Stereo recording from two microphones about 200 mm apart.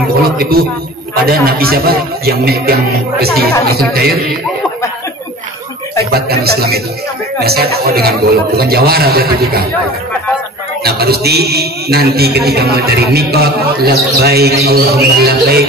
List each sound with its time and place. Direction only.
0.4 s a man's voice: 50° right (ahead or behind)
6.1 s a man's voice: 50° right (ahead or behind)
10.8 s a man's voice: 50° right (ahead or behind)